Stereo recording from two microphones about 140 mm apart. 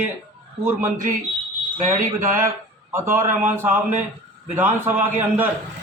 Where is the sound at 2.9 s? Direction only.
15° right (ahead or behind).